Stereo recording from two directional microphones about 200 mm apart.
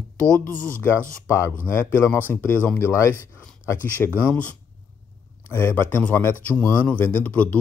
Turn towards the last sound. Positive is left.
turn(degrees=5)  # may be behind; listen again after turning